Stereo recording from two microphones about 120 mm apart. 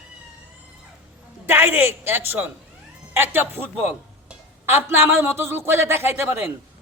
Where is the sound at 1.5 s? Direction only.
15° right (ahead or behind).